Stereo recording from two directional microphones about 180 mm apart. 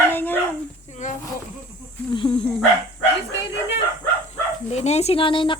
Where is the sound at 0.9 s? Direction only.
40° left (ahead or behind).